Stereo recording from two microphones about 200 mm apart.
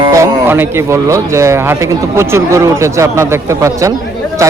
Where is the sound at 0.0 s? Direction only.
15° right (ahead or behind).